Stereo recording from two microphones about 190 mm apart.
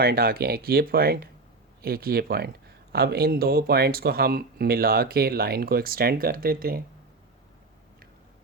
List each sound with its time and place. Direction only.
0.0 s speech: 55° right (ahead or behind)